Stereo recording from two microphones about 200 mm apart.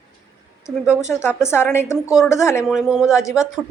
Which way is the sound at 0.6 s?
15° left (ahead or behind).